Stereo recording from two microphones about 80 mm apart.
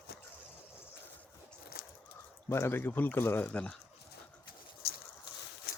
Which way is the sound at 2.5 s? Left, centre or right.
Left.